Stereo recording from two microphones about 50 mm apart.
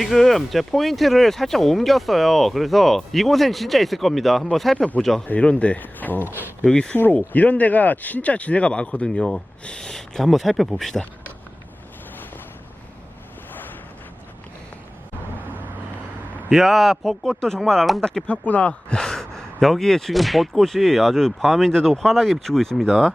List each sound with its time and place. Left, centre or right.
0.0 s speech: centre
5.4 s speech: left
5.8 s speech: left
6.7 s speech: centre
6.9 s speech: left
9.0 s speech: centre
16.5 s speech: centre
17.2 s speech: centre
18.3 s speech: left; by 23.1 s centre